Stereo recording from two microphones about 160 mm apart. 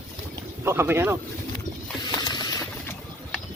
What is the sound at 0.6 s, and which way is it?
Speech, 15° right (ahead or behind).